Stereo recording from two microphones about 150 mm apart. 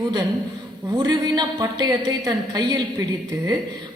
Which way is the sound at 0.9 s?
25° right (ahead or behind).